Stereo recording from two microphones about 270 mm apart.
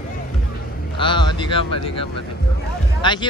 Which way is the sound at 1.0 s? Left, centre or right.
Centre.